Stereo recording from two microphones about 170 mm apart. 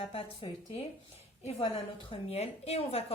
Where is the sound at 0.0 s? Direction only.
35° left (ahead or behind).